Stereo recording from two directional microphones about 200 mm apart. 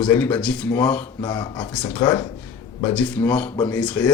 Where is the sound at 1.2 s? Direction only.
20° left (ahead or behind).